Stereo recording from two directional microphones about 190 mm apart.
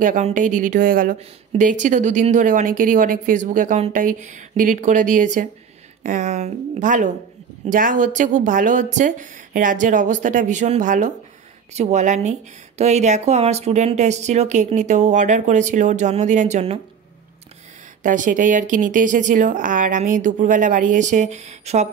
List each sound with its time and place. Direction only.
0.0 s speech: 45° right (ahead or behind)
18.0 s speech: 45° right (ahead or behind)